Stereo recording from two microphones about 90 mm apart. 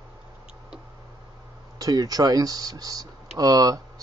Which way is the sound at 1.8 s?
45° right (ahead or behind).